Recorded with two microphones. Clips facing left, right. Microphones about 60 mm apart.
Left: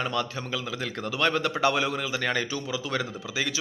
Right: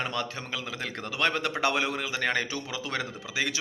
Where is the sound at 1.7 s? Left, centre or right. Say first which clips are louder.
Left 2 dB; right.